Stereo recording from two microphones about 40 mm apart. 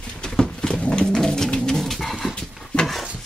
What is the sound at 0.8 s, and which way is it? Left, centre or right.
Pigeon, left.